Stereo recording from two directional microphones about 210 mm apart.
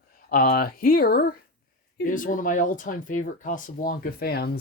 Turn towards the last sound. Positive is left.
turn(degrees=50)  # may be behind; listen again after turning